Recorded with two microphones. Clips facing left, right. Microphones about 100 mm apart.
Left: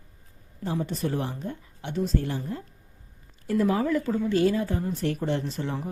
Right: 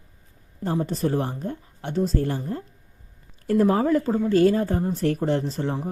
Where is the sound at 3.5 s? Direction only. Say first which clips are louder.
Right 4 dB; 40° right (ahead or behind).